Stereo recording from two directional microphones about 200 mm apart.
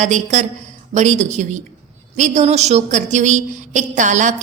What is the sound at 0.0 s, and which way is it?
A woman's voice, 35° right (ahead or behind).